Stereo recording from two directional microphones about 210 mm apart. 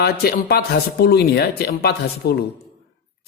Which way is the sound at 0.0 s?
50° left (ahead or behind).